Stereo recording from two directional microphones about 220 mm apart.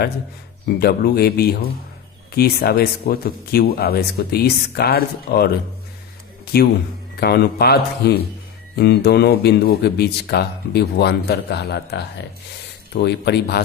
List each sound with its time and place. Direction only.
0.6 s speech: 45° left (ahead or behind)
6.4 s a sound: 45° left (ahead or behind)
7.2 s speech: 45° left (ahead or behind)